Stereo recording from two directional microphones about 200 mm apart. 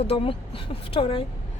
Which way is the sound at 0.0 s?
25° left (ahead or behind).